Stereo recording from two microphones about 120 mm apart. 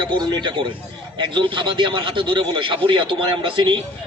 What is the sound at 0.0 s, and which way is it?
A man's voice, 40° right (ahead or behind).